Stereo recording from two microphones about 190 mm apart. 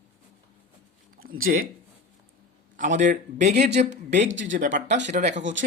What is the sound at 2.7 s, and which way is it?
Speech, 40° right (ahead or behind).